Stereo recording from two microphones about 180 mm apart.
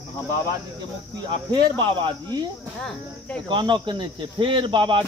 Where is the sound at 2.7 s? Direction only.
5° left (ahead or behind).